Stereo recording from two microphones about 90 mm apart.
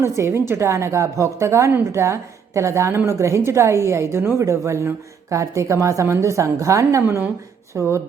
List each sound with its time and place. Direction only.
0.2 s a woman's voice: 25° right (ahead or behind)